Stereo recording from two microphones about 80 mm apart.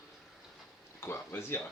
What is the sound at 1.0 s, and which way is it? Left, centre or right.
Speech, left.